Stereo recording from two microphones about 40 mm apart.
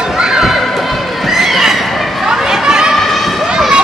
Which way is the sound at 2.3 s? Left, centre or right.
Centre.